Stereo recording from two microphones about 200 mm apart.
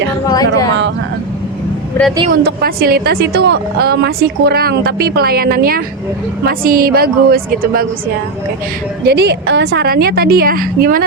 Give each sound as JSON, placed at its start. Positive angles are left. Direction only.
{"t": 0.3, "sound": "speech", "side_deg": 20}
{"t": 2.3, "sound": "a woman's voice", "side_deg": -50}
{"t": 9.0, "sound": "a woman's voice", "side_deg": -55}